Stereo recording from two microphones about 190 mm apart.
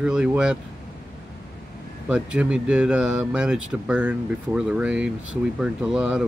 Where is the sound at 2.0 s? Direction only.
5° right (ahead or behind).